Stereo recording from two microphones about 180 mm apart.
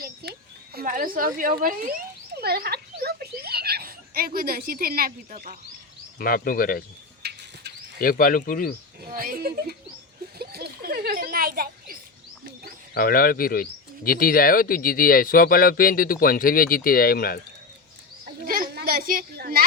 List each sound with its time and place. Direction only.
0.0 s a sound: 60° right (ahead or behind)
1.4 s speech: 50° right (ahead or behind)
6.1 s speech: 55° left (ahead or behind)
7.2 s bird: 65° right (ahead or behind)
7.9 s speech: 50° left (ahead or behind)
9.1 s speech: 55° right (ahead or behind)
10.3 s a sound: 60° right (ahead or behind)
12.9 s speech: 55° left (ahead or behind)
18.4 s a sound: 50° right (ahead or behind)